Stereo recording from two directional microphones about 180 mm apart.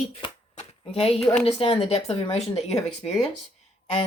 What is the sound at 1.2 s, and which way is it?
Speech, 5° left (ahead or behind).